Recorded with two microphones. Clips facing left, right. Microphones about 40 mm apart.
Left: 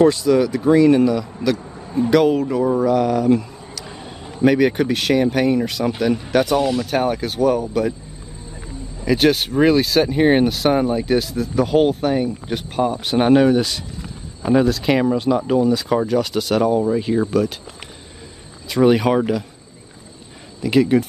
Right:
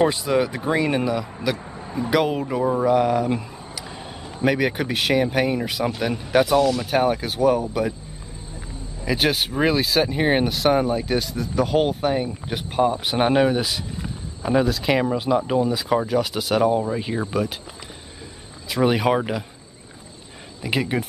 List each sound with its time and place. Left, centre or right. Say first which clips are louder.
0.0 s speech: left 5 dB; right
3.8 s a sound: left 1 dB; centre
4.4 s speech: left 6 dB; centre
9.0 s speech: left 5 dB; centre
18.7 s speech: left 4 dB; centre
20.6 s speech: left 8 dB; centre